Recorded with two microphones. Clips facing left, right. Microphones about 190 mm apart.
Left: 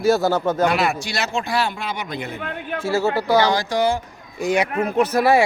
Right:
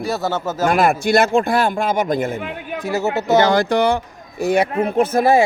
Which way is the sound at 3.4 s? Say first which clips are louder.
Right 4 dB; 55° right (ahead or behind).